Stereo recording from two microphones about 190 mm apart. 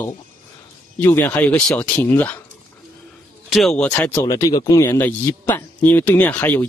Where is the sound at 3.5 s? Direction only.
5° left (ahead or behind).